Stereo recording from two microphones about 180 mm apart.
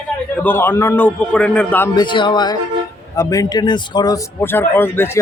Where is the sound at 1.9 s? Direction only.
25° left (ahead or behind).